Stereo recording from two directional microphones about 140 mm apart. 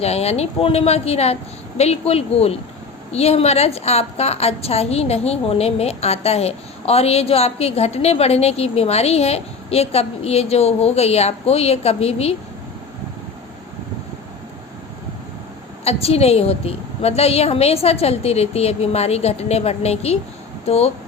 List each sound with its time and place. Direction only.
0.0 s a woman's voice: 50° left (ahead or behind)
15.8 s a woman's voice: 45° left (ahead or behind)